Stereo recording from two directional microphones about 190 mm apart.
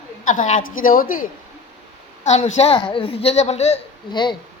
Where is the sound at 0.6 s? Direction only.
90° left.